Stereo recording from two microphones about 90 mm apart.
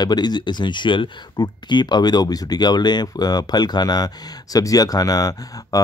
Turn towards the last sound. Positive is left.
turn(degrees=40)  # may be behind; listen again after turning